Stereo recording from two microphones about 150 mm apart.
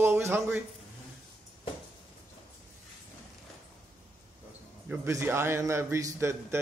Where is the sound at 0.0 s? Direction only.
15° right (ahead or behind).